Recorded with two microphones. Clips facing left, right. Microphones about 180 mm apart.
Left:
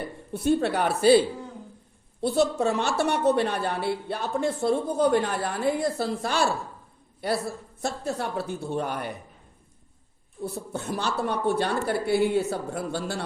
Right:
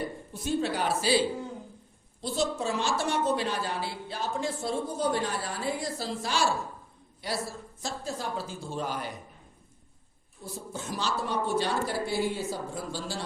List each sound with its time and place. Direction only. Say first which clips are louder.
0.3 s a woman's voice: left 6 dB; 60° left (ahead or behind)
2.2 s a woman's voice: left 7 dB; 60° left (ahead or behind)
10.4 s a woman's voice: left 6 dB; 60° left (ahead or behind)